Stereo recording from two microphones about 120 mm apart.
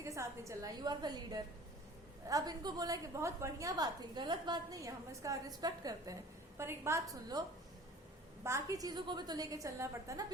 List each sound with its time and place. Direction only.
0.0 s a woman's voice: 25° right (ahead or behind)
8.4 s a woman's voice: 25° right (ahead or behind)